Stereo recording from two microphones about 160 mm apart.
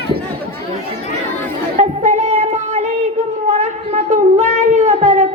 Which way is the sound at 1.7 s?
50° right (ahead or behind).